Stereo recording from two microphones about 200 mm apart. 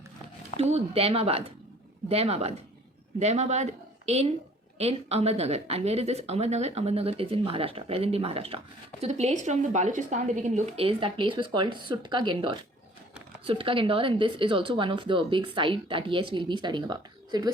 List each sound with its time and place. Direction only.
0.6 s a woman's voice: 30° right (ahead or behind)